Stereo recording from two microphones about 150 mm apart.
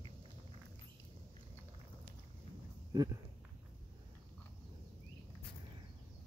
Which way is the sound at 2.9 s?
25° right (ahead or behind).